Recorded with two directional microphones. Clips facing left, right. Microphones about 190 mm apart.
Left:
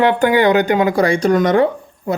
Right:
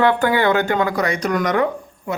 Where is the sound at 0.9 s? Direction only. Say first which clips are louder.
Left 6 dB; 30° left (ahead or behind).